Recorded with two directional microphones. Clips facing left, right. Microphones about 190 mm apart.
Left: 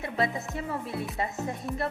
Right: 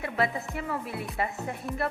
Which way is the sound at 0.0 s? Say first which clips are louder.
Even; 25° left (ahead or behind).